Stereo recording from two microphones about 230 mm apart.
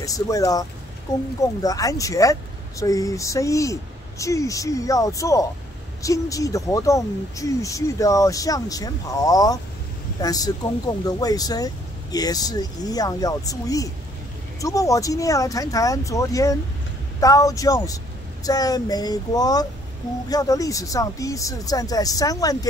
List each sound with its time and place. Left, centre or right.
0.0 s speech: centre